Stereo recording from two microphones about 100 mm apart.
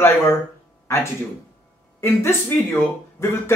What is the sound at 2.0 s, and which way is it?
Speech, 25° left (ahead or behind).